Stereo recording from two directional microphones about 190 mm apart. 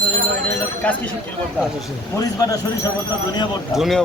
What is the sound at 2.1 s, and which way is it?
Speech, 20° left (ahead or behind).